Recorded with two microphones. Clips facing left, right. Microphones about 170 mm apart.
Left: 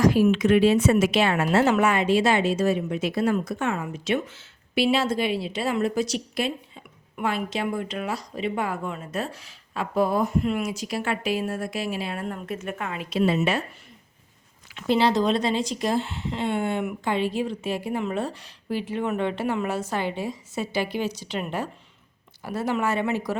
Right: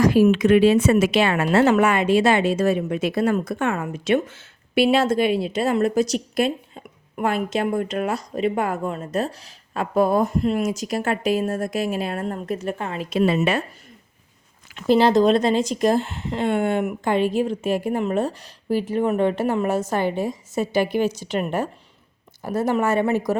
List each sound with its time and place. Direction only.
1.2 s a woman's voice: 65° right (ahead or behind); by 13.1 s 35° right (ahead or behind)
13.1 s a woman's voice: 60° right (ahead or behind)
14.8 s a woman's voice: 45° right (ahead or behind)